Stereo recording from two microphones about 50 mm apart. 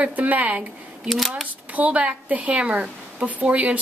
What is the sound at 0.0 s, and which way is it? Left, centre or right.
Speech, right.